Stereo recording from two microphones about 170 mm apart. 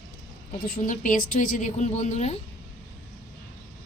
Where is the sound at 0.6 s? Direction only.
50° left (ahead or behind).